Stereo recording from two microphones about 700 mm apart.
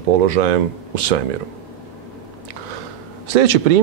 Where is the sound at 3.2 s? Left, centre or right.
Right.